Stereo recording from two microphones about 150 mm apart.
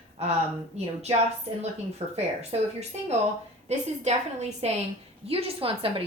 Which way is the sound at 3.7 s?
45° right (ahead or behind).